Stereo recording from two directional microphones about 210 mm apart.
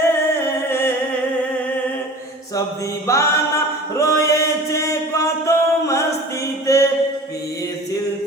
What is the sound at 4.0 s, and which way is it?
Chant, 15° left (ahead or behind).